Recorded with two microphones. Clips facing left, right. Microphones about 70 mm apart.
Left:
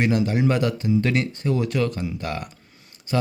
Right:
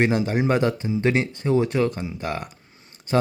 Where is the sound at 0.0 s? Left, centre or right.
Right.